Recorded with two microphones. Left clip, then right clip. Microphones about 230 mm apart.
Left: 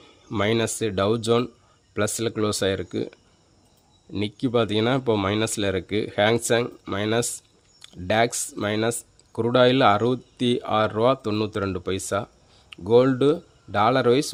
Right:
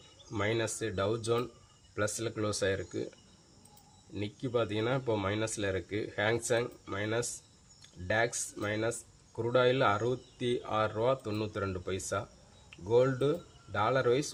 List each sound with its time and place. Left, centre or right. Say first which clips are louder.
0.3 s speech: left 9 dB; left
4.1 s speech: left 10 dB; left